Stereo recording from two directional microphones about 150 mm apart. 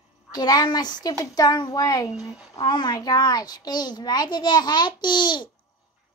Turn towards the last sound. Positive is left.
turn(degrees=30)  # may be behind; listen again after turning